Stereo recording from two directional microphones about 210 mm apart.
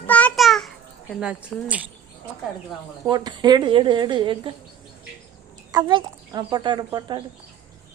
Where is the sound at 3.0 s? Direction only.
20° right (ahead or behind).